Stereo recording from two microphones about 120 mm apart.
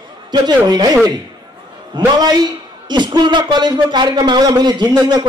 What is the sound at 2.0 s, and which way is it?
A man's voice, 35° right (ahead or behind).